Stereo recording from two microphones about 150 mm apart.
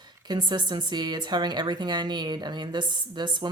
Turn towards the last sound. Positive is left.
turn(degrees=-30)  # may be behind; listen again after turning